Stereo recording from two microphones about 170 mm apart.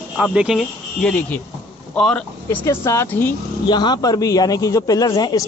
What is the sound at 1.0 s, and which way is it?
Speech, 10° left (ahead or behind).